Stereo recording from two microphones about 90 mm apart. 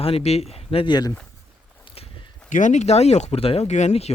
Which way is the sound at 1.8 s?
90° left.